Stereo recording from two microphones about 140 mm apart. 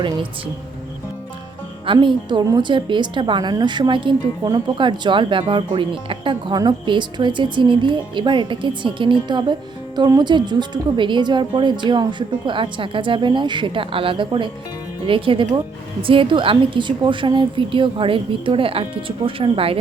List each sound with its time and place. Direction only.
1.9 s a woman's voice: 35° right (ahead or behind)